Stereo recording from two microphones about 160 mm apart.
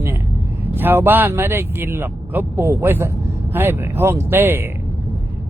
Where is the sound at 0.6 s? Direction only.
10° right (ahead or behind).